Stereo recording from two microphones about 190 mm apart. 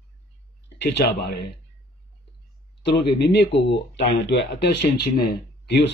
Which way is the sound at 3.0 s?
65° left (ahead or behind).